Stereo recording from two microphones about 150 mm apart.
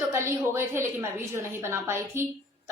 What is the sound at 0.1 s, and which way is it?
A woman's voice, 15° right (ahead or behind).